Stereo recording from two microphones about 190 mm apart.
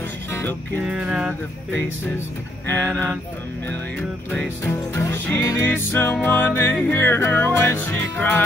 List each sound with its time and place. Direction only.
0.3 s music: 10° left (ahead or behind)
0.8 s music: 5° right (ahead or behind)
2.6 s music: 10° left (ahead or behind)
4.3 s music: 10° left (ahead or behind)